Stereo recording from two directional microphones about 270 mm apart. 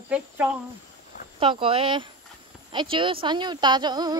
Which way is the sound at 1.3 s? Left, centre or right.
Centre.